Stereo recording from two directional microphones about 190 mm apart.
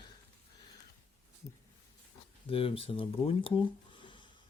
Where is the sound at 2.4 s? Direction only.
30° left (ahead or behind).